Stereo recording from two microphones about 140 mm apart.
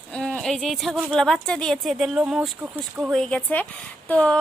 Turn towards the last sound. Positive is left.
turn(degrees=10)  # may be behind; listen again after turning